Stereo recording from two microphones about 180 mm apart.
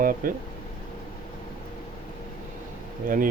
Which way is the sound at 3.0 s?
50° right (ahead or behind).